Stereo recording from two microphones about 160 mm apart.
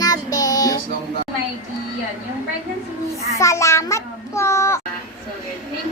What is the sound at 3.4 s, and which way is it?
Child singing, 20° left (ahead or behind).